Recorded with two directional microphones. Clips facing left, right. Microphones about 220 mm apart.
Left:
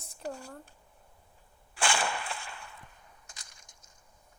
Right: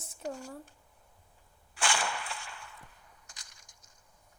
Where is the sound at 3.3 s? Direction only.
25° left (ahead or behind).